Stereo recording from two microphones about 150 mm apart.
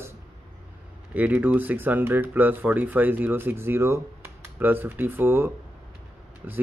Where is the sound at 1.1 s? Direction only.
10° right (ahead or behind).